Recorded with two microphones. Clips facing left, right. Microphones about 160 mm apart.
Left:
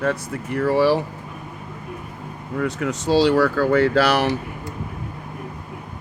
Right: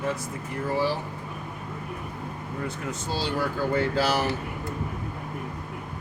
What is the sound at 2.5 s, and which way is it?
Speech, 90° left.